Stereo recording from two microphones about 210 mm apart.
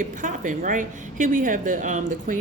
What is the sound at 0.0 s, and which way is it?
A woman's voice, 40° right (ahead or behind).